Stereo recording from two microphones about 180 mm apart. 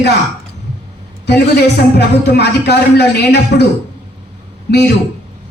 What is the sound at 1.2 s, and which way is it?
A woman's voice, 65° left (ahead or behind).